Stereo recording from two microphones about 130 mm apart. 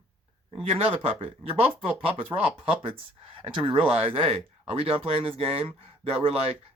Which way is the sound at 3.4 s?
40° right (ahead or behind).